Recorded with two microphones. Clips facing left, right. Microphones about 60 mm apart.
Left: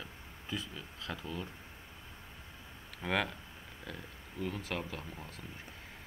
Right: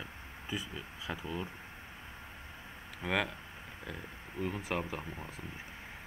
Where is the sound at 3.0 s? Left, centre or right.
Centre.